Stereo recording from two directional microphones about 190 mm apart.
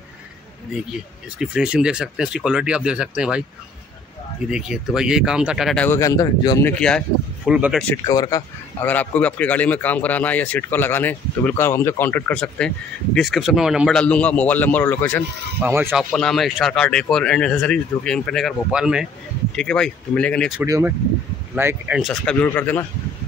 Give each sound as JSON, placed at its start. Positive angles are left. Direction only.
{"t": 1.4, "sound": "speech", "side_deg": -5}
{"t": 4.5, "sound": "speech", "side_deg": -5}
{"t": 5.9, "sound": "a man's voice", "side_deg": 15}
{"t": 6.7, "sound": "speech", "side_deg": 5}
{"t": 7.9, "sound": "a man's voice", "side_deg": 15}
{"t": 15.6, "sound": "speech", "side_deg": -10}
{"t": 15.9, "sound": "speech", "side_deg": 5}
{"t": 20.6, "sound": "speech", "side_deg": -15}